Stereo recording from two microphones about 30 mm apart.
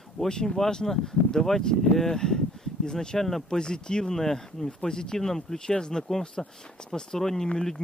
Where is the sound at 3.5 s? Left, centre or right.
Left.